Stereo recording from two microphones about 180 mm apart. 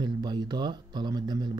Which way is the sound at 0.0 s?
25° right (ahead or behind).